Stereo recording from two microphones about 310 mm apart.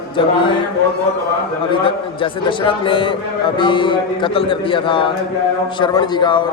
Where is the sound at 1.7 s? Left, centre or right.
Centre.